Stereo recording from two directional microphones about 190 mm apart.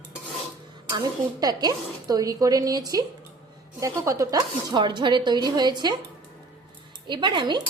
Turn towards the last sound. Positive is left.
turn(degrees=-25)  # may be behind; listen again after turning